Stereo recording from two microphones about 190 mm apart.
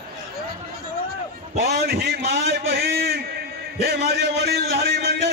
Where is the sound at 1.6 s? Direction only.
55° right (ahead or behind).